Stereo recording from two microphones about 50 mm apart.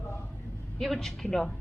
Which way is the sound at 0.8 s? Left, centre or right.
Centre.